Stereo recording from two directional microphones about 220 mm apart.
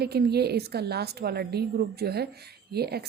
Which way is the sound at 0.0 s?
45° right (ahead or behind).